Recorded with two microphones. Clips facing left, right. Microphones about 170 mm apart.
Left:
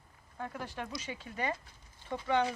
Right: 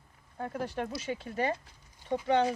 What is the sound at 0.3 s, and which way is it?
Speech, 40° right (ahead or behind).